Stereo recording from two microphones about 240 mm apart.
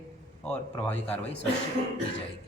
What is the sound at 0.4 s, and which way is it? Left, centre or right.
Speech, centre.